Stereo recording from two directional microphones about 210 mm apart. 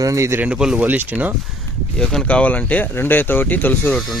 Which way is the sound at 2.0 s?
5° left (ahead or behind).